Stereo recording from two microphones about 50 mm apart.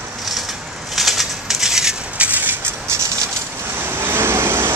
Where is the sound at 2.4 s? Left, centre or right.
Right.